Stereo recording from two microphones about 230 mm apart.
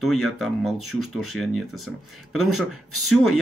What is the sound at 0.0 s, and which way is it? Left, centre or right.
Speech, centre.